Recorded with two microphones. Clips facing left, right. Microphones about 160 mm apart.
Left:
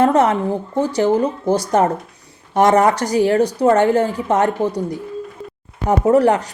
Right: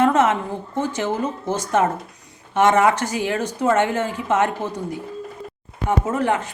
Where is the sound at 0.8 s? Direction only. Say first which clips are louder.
Left 7 dB; 35° left (ahead or behind).